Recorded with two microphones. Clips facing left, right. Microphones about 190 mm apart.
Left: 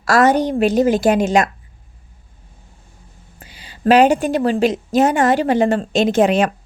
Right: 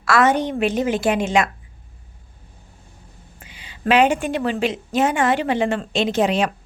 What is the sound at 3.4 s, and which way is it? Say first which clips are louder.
A woman's voice: left 6 dB; 40° left (ahead or behind).